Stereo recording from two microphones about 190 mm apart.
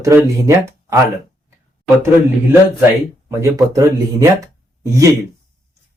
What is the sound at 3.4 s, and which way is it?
Speech, 15° right (ahead or behind).